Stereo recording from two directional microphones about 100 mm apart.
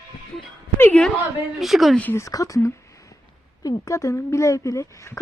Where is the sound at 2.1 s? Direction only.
35° left (ahead or behind).